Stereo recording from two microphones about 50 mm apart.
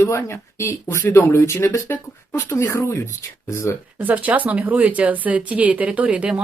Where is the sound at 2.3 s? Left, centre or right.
Left.